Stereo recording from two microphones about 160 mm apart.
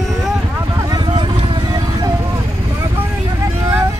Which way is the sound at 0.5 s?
20° right (ahead or behind).